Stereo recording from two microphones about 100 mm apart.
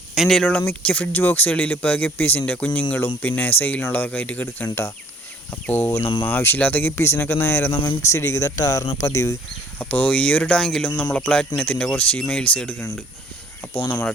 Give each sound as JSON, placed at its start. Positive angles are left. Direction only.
{"t": 0.1, "sound": "speech", "side_deg": 0}
{"t": 0.4, "sound": "speech", "side_deg": 15}
{"t": 9.7, "sound": "speech", "side_deg": 15}
{"t": 13.7, "sound": "speech", "side_deg": 30}